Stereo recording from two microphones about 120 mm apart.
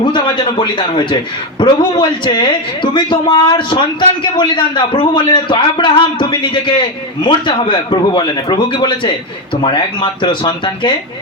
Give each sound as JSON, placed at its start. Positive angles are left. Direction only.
{"t": 0.0, "sound": "a man's voice", "side_deg": 40}